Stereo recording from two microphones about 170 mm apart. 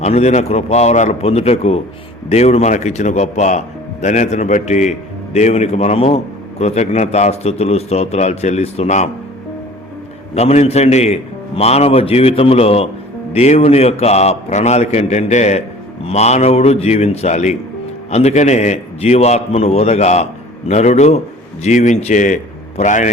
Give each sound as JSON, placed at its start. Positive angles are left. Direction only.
{"t": 0.0, "sound": "a man's voice", "side_deg": 40}
{"t": 10.3, "sound": "a man's voice", "side_deg": 40}